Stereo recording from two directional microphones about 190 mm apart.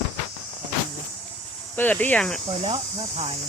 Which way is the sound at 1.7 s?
10° left (ahead or behind).